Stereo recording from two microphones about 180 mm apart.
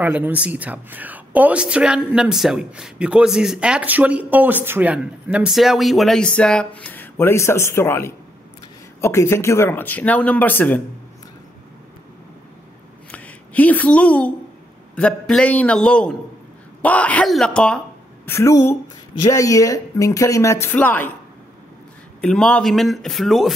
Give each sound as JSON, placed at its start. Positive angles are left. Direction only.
{"t": 0.0, "sound": "speech", "side_deg": -10}
{"t": 13.1, "sound": "a woman's voice", "side_deg": 10}
{"t": 22.2, "sound": "speech", "side_deg": 5}